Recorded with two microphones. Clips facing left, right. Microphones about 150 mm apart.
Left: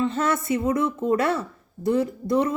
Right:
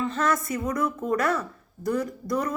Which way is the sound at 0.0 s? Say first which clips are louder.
Left 2 dB; 25° left (ahead or behind).